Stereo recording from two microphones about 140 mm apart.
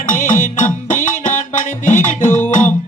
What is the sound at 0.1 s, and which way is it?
Music, 70° left (ahead or behind).